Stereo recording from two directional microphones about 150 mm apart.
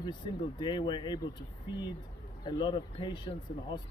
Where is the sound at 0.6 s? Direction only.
30° left (ahead or behind).